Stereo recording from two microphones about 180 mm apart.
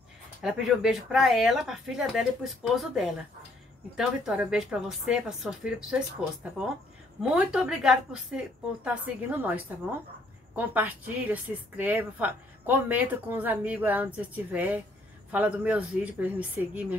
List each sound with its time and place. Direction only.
0.4 s speech: 5° right (ahead or behind)
7.2 s a woman's voice: 5° right (ahead or behind)